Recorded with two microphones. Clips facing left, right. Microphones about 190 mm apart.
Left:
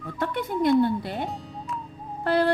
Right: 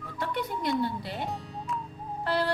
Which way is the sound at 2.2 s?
50° left (ahead or behind).